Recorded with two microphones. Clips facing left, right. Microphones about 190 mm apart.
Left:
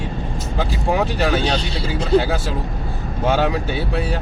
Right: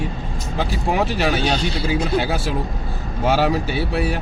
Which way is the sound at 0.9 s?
5° right (ahead or behind).